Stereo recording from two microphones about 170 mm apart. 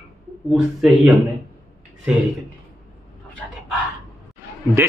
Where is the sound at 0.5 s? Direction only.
Centre (ahead or behind).